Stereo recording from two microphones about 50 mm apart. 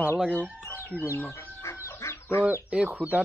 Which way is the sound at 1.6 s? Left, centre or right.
Left.